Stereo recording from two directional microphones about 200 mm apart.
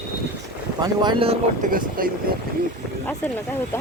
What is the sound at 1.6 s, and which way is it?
Speech, 45° right (ahead or behind).